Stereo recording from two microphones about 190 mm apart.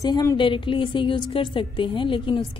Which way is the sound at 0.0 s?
20° left (ahead or behind).